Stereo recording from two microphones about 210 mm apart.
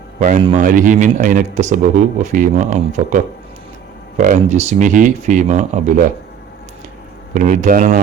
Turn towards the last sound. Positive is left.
turn(degrees=-40)  # may be behind; listen again after turning